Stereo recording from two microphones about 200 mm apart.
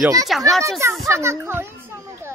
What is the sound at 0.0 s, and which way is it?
Speech, 15° right (ahead or behind).